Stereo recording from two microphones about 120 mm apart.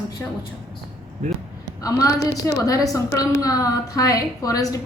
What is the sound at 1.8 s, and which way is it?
A woman's voice, 30° left (ahead or behind).